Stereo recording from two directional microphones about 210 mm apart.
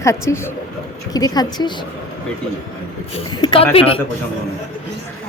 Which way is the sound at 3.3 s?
20° left (ahead or behind).